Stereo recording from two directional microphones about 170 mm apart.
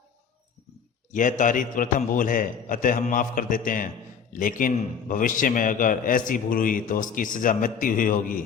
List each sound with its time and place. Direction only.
1.1 s a man's voice: 50° left (ahead or behind)